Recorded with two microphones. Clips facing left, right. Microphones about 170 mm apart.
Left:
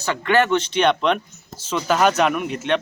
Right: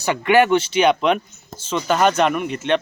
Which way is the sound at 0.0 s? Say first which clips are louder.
Right 3 dB; 15° right (ahead or behind).